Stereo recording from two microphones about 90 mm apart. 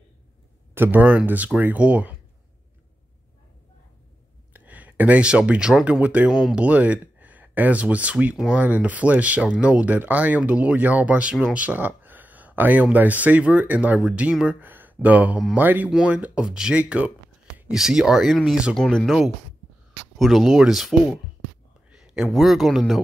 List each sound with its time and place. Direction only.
0.7 s speech: 20° right (ahead or behind)
4.6 s speech: 15° right (ahead or behind)
6.3 s speech: centre (ahead or behind)
6.6 s speech: 15° right (ahead or behind)
11.5 s a sound: 20° right (ahead or behind)
12.9 s speech: 20° right (ahead or behind)
21.9 s a sound: 5° right (ahead or behind)
22.3 s speech: centre (ahead or behind)